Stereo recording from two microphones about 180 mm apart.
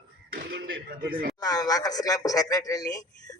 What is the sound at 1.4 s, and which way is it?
Speech, 20° left (ahead or behind).